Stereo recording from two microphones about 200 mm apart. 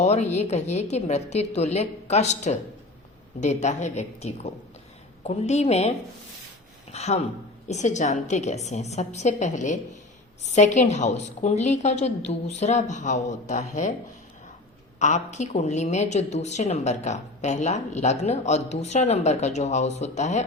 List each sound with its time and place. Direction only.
0.0 s a woman's voice: 35° left (ahead or behind)
6.9 s a woman's voice: 30° left (ahead or behind)
14.9 s a woman's voice: 35° left (ahead or behind)